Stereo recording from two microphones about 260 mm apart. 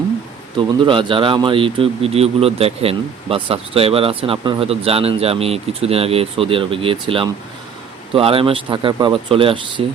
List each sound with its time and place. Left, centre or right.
0.5 s speech: centre